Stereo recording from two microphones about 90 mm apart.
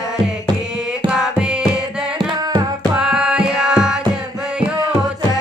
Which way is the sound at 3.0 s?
10° right (ahead or behind).